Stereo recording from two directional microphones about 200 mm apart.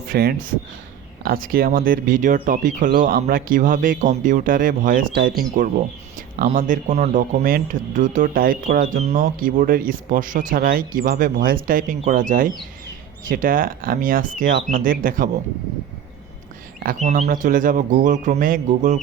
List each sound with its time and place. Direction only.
0.1 s speech: 50° right (ahead or behind)
16.8 s speech: 40° right (ahead or behind)